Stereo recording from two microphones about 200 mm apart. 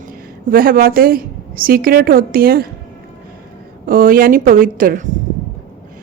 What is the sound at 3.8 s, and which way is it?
A woman's voice, 45° right (ahead or behind).